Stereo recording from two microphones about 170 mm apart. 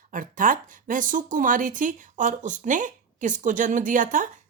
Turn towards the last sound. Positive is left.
turn(degrees=-50)  # may be behind; listen again after turning